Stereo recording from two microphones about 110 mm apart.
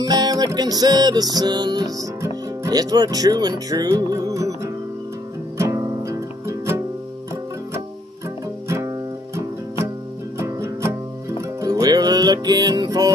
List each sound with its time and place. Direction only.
0.0 s music: 35° right (ahead or behind)
2.2 s speech: 30° right (ahead or behind)
5.6 s music: 35° right (ahead or behind)
8.6 s music: 25° right (ahead or behind)